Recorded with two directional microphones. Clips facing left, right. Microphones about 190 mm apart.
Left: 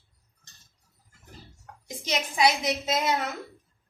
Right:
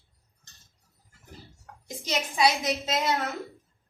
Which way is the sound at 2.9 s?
Centre (ahead or behind).